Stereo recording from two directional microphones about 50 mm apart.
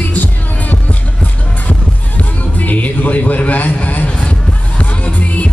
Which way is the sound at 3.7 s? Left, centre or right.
Left.